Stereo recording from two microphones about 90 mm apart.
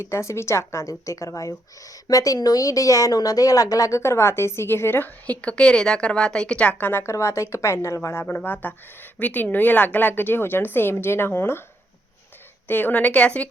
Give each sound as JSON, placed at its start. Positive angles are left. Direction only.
{"t": 0.0, "sound": "a woman's voice", "side_deg": 30}
{"t": 12.6, "sound": "a woman's voice", "side_deg": 20}